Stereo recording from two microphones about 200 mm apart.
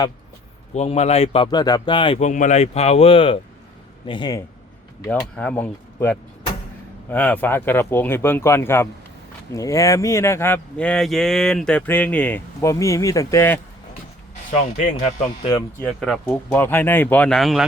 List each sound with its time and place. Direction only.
0.7 s a man's voice: 35° left (ahead or behind)
5.0 s speech: 5° left (ahead or behind)
14.5 s a man's voice: 35° left (ahead or behind)
15.8 s speech: 5° left (ahead or behind)